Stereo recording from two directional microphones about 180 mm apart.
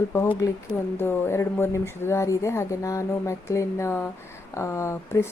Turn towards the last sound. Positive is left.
turn(degrees=15)  # may be behind; listen again after turning